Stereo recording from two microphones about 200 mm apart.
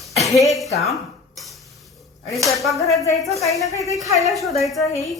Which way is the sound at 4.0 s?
15° right (ahead or behind).